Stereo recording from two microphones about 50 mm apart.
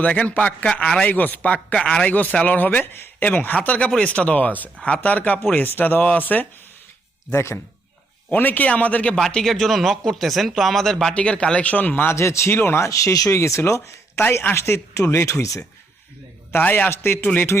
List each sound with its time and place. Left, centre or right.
0.0 s a man's voice: left
3.2 s speech: left
7.3 s speech: left
8.3 s speech: left
9.3 s speech: centre
11.1 s a man's voice: left
11.9 s speech: left
14.2 s speech: left
16.5 s a man's voice: left
16.9 s speech: left
17.5 s speech: left